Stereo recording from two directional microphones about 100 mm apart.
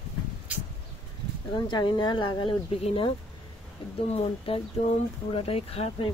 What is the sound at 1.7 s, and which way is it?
Speech, 50° left (ahead or behind).